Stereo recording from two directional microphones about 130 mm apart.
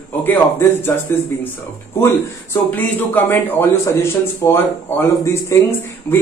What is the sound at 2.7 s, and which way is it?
A man's voice, 15° left (ahead or behind).